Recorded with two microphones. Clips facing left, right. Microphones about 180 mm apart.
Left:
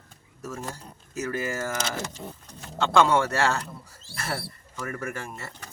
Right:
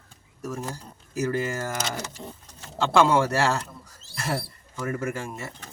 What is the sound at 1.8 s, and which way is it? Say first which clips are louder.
Speech: even; centre (ahead or behind).